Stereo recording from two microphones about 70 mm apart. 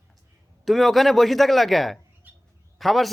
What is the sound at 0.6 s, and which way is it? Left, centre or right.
A man's voice, centre.